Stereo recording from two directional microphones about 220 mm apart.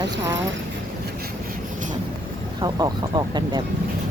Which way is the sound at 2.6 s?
20° right (ahead or behind).